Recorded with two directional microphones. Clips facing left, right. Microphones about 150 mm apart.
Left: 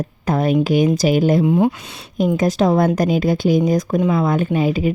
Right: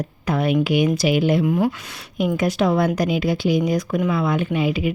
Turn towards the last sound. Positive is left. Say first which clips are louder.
# left 3 dB
turn(degrees=40)  # may be behind; listen again after turning